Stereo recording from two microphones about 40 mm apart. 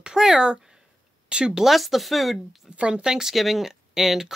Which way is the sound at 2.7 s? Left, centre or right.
Right.